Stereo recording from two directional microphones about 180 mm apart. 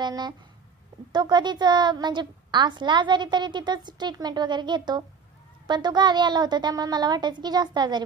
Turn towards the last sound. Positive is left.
turn(degrees=-25)  # may be behind; listen again after turning